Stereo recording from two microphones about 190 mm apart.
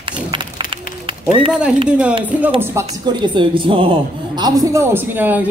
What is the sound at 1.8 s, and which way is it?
Speech, 5° right (ahead or behind).